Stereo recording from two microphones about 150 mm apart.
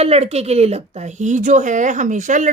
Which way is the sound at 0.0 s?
45° right (ahead or behind).